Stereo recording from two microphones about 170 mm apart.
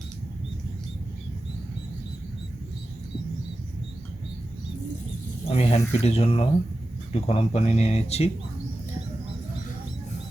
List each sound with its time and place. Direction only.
5.5 s speech: 40° left (ahead or behind)